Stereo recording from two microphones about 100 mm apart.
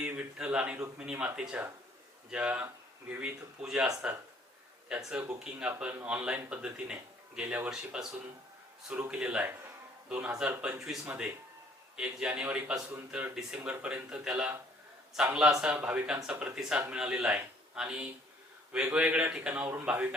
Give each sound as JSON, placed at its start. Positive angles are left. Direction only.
{"t": 0.0, "sound": "speech", "side_deg": -10}
{"t": 1.4, "sound": "speech", "side_deg": -10}
{"t": 4.9, "sound": "speech", "side_deg": -5}
{"t": 10.8, "sound": "speech", "side_deg": -5}